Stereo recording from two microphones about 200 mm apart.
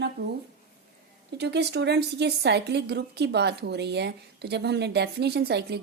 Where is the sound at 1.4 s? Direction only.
55° right (ahead or behind).